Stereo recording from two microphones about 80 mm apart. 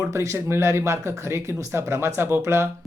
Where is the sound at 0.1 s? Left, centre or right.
Right.